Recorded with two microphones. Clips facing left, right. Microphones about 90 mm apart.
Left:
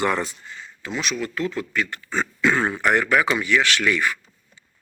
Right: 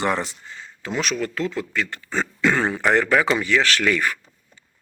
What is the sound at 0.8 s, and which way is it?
Speech, 40° right (ahead or behind).